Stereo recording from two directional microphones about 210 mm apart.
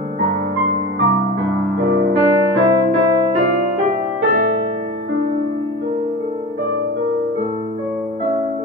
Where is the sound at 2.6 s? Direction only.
20° right (ahead or behind).